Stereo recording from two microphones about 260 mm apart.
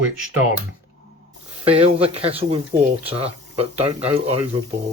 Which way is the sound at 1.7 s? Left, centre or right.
Right.